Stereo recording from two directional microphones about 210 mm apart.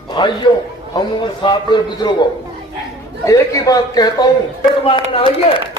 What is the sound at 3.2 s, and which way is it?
A man's voice, 15° left (ahead or behind).